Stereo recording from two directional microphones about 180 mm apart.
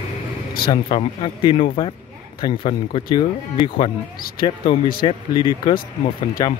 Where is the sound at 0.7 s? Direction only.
30° left (ahead or behind).